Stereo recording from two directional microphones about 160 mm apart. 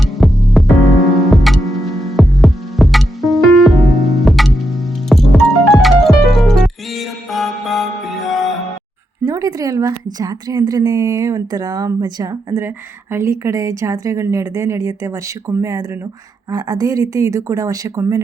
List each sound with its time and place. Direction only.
0.0 s music: centre (ahead or behind)
9.2 s a woman's voice: 20° right (ahead or behind)